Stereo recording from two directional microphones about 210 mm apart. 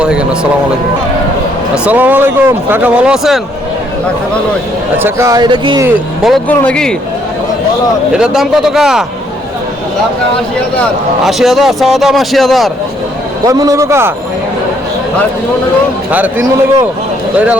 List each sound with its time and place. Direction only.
0.0 s speech: 5° right (ahead or behind)
1.7 s speech: 5° right (ahead or behind)
4.9 s speech: 10° right (ahead or behind)
6.2 s a man's voice: 5° left (ahead or behind)
8.1 s a man's voice: 5° right (ahead or behind)
11.3 s a man's voice: centre (ahead or behind)
13.4 s speech: 15° right (ahead or behind)
16.1 s speech: 10° right (ahead or behind)